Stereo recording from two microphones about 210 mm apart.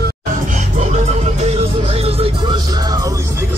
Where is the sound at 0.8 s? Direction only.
30° right (ahead or behind); by 3.2 s 15° right (ahead or behind).